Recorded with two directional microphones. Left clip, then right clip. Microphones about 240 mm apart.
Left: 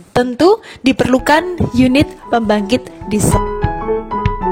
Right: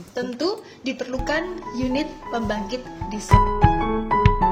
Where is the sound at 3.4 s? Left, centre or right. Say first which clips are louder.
Even; centre.